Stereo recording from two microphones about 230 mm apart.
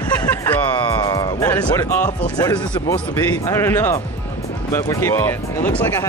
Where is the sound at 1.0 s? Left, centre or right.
Centre.